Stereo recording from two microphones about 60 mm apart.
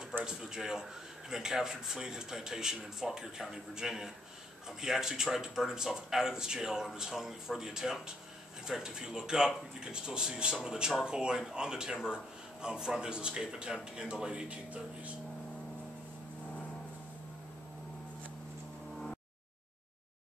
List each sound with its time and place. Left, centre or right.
0.2 s speech: centre